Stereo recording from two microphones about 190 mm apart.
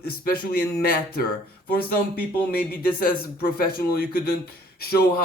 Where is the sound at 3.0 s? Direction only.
50° left (ahead or behind).